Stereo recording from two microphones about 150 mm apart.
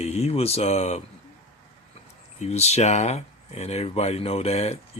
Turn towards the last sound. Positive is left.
turn(degrees=45)  # may be behind; listen again after turning